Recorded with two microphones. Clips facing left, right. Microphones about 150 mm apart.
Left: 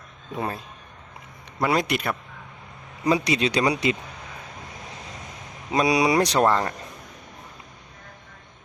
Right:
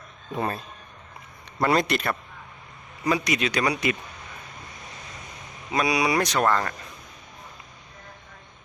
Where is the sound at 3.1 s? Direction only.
30° left (ahead or behind).